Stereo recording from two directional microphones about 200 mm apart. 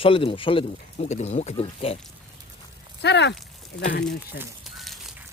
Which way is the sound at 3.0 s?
60° left (ahead or behind).